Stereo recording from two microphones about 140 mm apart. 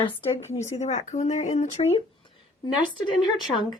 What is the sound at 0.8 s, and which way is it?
Speech, 60° left (ahead or behind).